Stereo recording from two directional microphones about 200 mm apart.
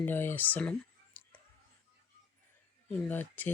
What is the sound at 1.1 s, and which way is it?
Music, 10° left (ahead or behind).